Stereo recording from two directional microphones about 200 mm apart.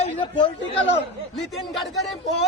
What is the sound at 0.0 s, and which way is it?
Speech, 30° left (ahead or behind).